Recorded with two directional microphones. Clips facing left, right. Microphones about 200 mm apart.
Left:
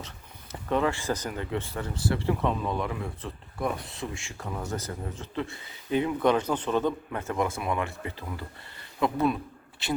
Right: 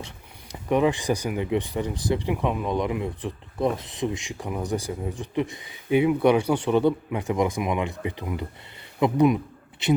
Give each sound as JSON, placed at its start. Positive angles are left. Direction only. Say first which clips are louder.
{"t": 0.7, "sound": "a man's voice", "louder": "right 5 dB", "side_deg": -15}